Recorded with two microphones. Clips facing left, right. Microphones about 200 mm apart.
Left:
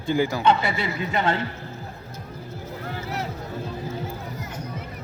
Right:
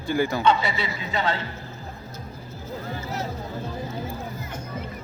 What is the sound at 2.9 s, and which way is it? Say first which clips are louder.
Music: left 1 dB; 70° left (ahead or behind).